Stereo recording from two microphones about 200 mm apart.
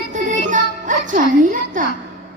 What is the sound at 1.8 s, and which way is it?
Speech, 40° right (ahead or behind).